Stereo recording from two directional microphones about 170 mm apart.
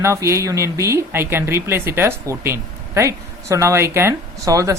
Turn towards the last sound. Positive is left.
turn(degrees=-20)  # may be behind; listen again after turning